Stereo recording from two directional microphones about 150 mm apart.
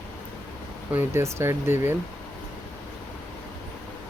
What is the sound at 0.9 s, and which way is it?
Speech, 15° right (ahead or behind).